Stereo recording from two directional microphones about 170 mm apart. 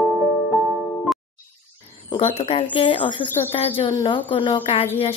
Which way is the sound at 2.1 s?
35° left (ahead or behind).